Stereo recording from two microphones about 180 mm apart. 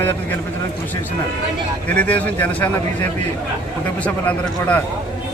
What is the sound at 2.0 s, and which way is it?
Speech, 10° left (ahead or behind).